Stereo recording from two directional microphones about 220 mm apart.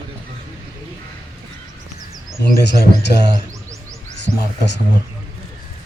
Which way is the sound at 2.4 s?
50° left (ahead or behind).